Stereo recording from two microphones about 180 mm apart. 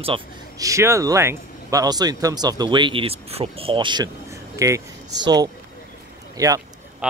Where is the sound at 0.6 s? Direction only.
15° right (ahead or behind).